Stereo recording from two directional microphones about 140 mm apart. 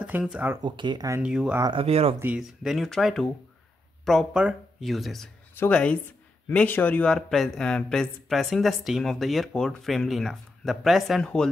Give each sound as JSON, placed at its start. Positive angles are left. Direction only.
{"t": 0.0, "sound": "speech", "side_deg": -5}
{"t": 0.6, "sound": "speech", "side_deg": -35}
{"t": 1.2, "sound": "speech", "side_deg": -5}
{"t": 1.6, "sound": "speech", "side_deg": -40}
{"t": 2.1, "sound": "speech", "side_deg": -10}